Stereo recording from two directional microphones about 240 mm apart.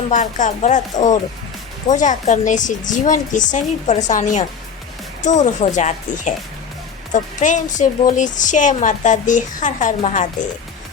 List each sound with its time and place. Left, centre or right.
0.1 s speech: left